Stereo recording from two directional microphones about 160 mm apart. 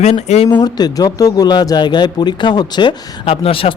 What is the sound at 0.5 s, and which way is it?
Speech, 25° left (ahead or behind).